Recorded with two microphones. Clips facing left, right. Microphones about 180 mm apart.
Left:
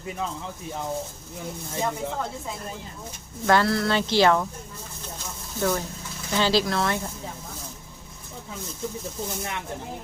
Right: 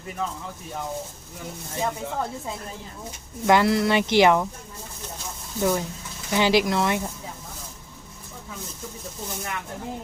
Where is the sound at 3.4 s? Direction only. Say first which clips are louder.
Right 2 dB; 15° right (ahead or behind).